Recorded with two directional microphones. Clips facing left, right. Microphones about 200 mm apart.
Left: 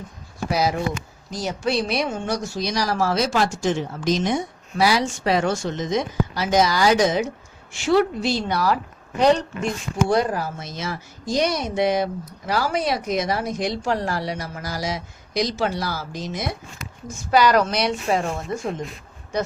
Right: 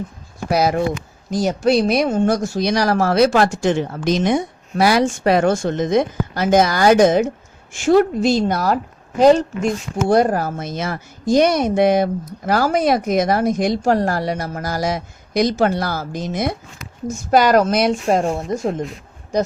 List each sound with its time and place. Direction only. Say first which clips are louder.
0.5 s speech: right 5 dB; 55° right (ahead or behind); by 18.7 s 40° right (ahead or behind)